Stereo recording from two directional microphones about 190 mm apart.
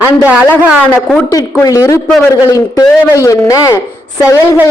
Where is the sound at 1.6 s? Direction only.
15° left (ahead or behind).